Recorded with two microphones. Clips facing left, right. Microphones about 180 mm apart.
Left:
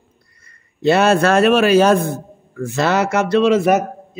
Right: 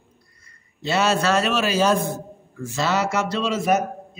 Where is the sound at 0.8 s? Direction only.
55° left (ahead or behind).